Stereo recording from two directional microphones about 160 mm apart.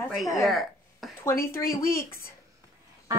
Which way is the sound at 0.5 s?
Centre (ahead or behind).